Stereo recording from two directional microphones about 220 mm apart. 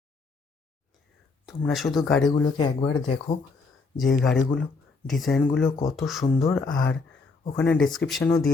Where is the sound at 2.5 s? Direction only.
20° left (ahead or behind).